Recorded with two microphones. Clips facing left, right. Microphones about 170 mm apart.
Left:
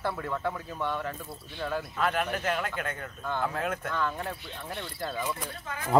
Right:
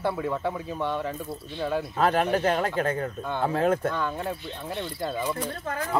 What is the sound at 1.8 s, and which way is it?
Speech, 35° right (ahead or behind).